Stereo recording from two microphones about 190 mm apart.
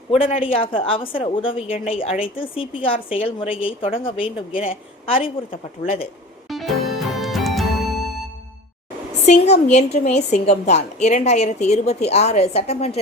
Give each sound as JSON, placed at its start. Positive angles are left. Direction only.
{"t": 0.1, "sound": "a woman's voice", "side_deg": 30}
{"t": 6.5, "sound": "music", "side_deg": 0}
{"t": 9.2, "sound": "a woman's voice", "side_deg": 35}